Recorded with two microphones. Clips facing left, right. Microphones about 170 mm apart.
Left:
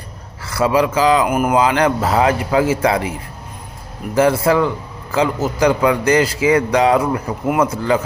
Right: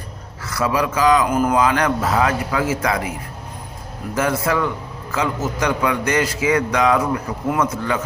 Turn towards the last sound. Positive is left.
turn(degrees=30)  # may be behind; listen again after turning